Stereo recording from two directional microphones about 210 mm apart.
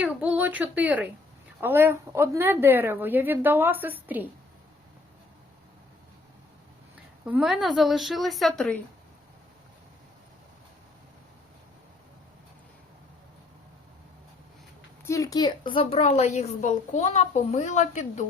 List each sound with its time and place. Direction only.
0.0 s speech: 5° right (ahead or behind)
7.3 s a woman's voice: 5° right (ahead or behind)
15.0 s a woman's voice: 15° left (ahead or behind); by 18.3 s 35° left (ahead or behind)